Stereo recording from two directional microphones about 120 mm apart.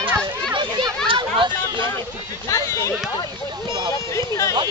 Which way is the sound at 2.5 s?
25° left (ahead or behind).